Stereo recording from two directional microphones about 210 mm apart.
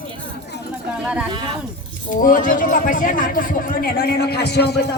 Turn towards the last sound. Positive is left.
turn(degrees=50)  # may be behind; listen again after turning